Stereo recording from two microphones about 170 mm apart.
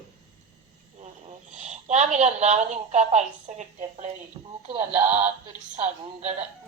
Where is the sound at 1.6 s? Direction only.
40° right (ahead or behind).